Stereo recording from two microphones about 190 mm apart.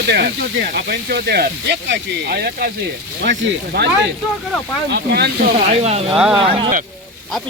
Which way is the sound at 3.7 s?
60° right (ahead or behind).